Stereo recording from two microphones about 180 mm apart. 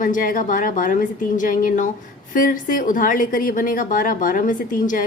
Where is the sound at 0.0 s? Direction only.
50° left (ahead or behind).